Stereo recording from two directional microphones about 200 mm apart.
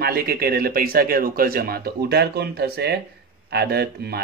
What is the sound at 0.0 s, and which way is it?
A man's voice, 50° right (ahead or behind).